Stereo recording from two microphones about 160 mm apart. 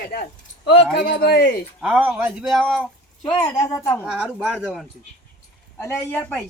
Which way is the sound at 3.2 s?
20° left (ahead or behind).